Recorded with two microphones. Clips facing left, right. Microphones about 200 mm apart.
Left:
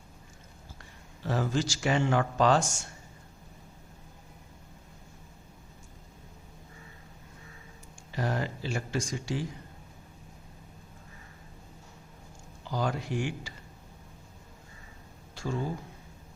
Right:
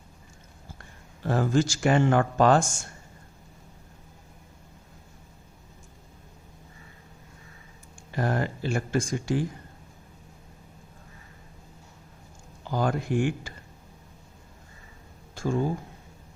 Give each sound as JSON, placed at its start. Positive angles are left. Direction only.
{"t": 1.2, "sound": "speech", "side_deg": -50}
{"t": 8.1, "sound": "speech", "side_deg": -50}
{"t": 12.7, "sound": "speech", "side_deg": -50}
{"t": 15.4, "sound": "speech", "side_deg": -50}